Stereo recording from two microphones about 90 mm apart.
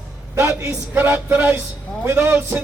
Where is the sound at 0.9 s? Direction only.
20° right (ahead or behind).